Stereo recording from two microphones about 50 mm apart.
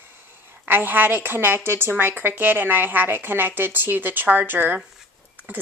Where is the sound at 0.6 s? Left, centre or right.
Right.